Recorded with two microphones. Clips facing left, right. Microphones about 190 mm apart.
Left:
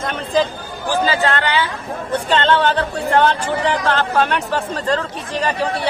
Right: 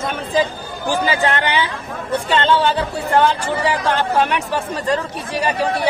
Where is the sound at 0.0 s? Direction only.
5° right (ahead or behind).